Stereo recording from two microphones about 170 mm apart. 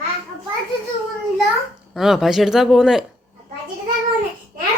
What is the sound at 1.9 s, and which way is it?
Speech, centre (ahead or behind).